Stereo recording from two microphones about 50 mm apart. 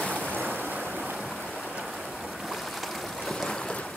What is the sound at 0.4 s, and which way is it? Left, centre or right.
Waves, right.